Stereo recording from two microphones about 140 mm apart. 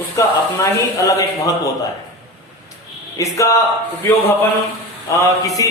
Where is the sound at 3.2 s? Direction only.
20° left (ahead or behind).